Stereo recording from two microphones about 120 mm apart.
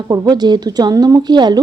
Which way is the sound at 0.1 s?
35° right (ahead or behind).